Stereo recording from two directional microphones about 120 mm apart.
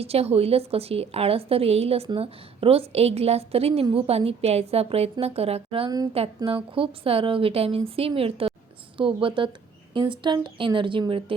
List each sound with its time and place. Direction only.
0.0 s a woman's voice: 55° right (ahead or behind)